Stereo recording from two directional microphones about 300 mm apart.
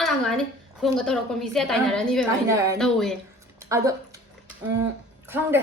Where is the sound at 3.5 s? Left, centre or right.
Centre.